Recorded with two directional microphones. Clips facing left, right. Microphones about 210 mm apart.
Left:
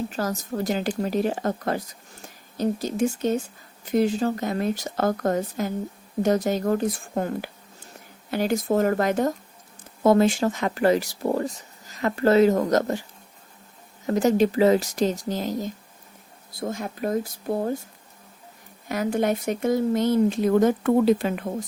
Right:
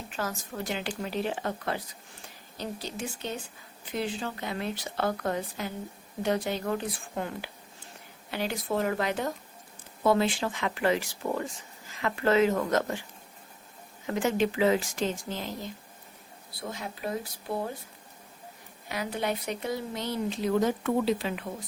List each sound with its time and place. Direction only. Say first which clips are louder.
0.1 s speech: left 7 dB; 40° left (ahead or behind)
14.1 s speech: left 7 dB; 40° left (ahead or behind)
18.9 s speech: left 8 dB; 45° left (ahead or behind)